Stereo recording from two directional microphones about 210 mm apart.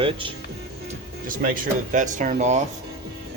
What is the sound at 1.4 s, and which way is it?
Speech, 40° right (ahead or behind).